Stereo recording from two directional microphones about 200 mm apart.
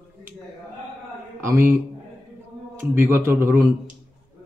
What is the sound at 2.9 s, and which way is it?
Speech, 10° right (ahead or behind).